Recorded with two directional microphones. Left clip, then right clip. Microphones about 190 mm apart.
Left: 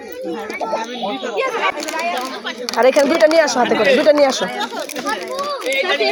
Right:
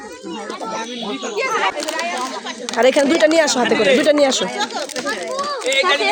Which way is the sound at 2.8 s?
25° right (ahead or behind).